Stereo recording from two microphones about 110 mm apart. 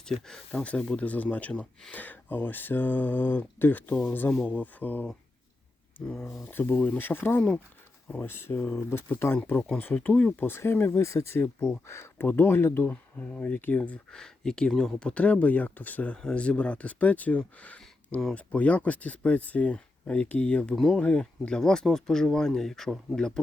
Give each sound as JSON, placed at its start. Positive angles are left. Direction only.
{"t": 0.0, "sound": "speech", "side_deg": 5}
{"t": 6.1, "sound": "speech", "side_deg": 5}
{"t": 6.4, "sound": "speech", "side_deg": 20}
{"t": 11.4, "sound": "speech", "side_deg": 10}
{"t": 11.9, "sound": "speech", "side_deg": 25}